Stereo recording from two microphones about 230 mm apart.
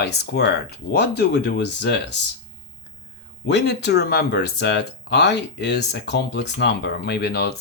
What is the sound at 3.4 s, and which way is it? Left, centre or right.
Speech, left.